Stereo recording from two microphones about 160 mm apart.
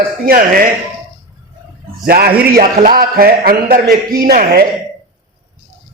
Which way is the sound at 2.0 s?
70° right (ahead or behind).